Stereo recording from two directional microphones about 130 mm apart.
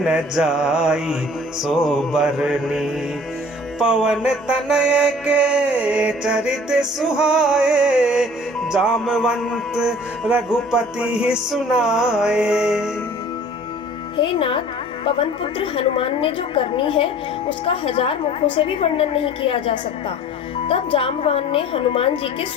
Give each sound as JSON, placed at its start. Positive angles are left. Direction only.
{"t": 0.0, "sound": "mantra", "side_deg": -5}
{"t": 14.2, "sound": "a woman's voice", "side_deg": 40}